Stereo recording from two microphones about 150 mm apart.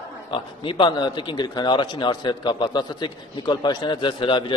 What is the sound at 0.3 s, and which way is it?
Speech, 35° left (ahead or behind).